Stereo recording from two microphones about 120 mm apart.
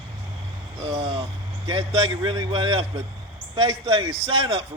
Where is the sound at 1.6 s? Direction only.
40° right (ahead or behind).